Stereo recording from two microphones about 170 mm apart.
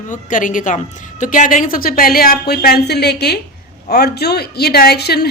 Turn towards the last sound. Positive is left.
turn(degrees=70)  # may be behind; listen again after turning